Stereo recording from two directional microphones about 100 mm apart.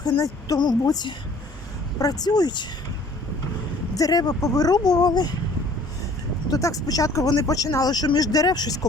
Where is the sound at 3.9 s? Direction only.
40° left (ahead or behind).